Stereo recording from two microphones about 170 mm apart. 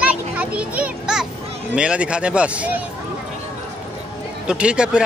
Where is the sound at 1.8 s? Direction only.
5° right (ahead or behind).